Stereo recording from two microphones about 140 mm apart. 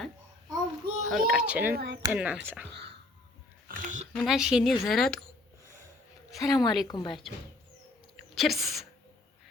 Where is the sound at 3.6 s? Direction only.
70° right (ahead or behind).